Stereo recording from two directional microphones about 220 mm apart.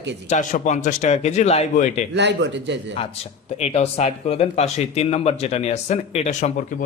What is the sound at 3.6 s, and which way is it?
Speech, 30° left (ahead or behind).